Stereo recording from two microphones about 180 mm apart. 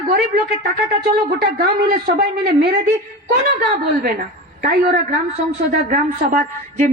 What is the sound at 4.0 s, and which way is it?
A woman's voice, 55° right (ahead or behind).